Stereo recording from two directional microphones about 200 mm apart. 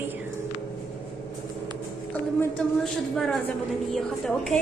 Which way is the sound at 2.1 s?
5° left (ahead or behind).